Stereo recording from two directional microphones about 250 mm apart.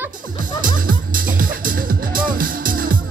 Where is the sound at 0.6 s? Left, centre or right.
Right.